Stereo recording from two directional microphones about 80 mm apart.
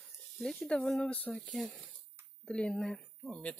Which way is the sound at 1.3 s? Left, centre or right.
Centre.